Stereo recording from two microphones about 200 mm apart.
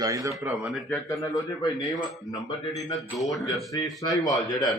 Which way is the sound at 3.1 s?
Centre (ahead or behind).